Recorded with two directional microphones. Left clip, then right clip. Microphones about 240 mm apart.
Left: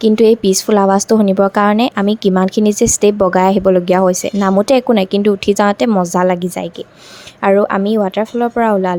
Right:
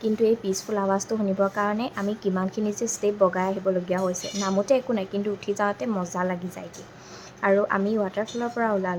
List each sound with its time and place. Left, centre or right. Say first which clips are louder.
0.0 s speech: left 13 dB; left